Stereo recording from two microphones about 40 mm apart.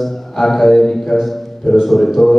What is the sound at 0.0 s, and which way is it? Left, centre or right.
A man's voice, centre.